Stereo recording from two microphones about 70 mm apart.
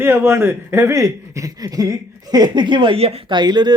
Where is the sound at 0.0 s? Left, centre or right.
Right.